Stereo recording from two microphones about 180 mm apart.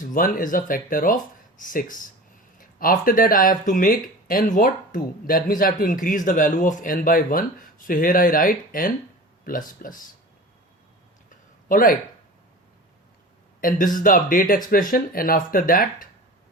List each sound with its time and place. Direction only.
0.0 s speech: 50° left (ahead or behind)
11.3 s a sound: 50° left (ahead or behind)
13.6 s speech: 50° left (ahead or behind)